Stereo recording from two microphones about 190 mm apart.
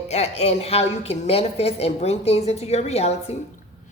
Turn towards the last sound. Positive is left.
turn(degrees=35)  # may be behind; listen again after turning